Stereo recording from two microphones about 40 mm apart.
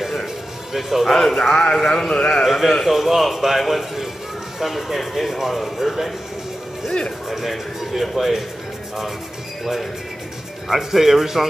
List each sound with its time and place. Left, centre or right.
0.7 s speech: centre
1.1 s speech: centre
2.4 s speech: centre
7.2 s speech: centre
10.7 s speech: centre